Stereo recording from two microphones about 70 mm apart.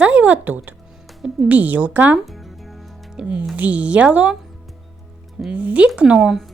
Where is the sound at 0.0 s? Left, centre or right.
Right.